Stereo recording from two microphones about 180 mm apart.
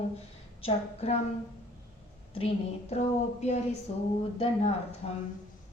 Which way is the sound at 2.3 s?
35° left (ahead or behind).